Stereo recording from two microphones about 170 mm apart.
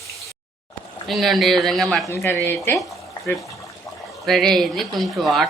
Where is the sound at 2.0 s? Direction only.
15° left (ahead or behind).